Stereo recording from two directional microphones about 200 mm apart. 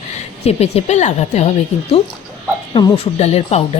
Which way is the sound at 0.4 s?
30° left (ahead or behind).